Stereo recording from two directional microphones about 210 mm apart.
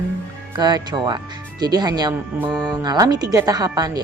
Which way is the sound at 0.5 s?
20° right (ahead or behind).